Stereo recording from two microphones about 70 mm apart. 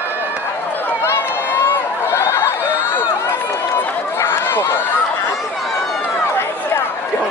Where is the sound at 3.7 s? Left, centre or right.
Left.